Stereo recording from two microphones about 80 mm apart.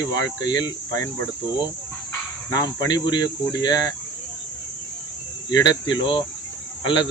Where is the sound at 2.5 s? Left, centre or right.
Left.